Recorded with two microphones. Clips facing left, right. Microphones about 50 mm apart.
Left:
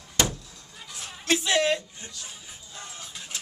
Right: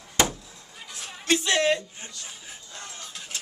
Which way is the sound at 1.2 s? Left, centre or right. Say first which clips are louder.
Right 1 dB; centre.